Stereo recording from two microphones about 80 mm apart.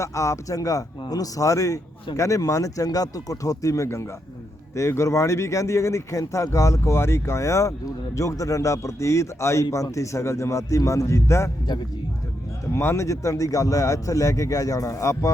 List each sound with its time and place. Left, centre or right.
0.0 s a man's voice: left
12.7 s a man's voice: left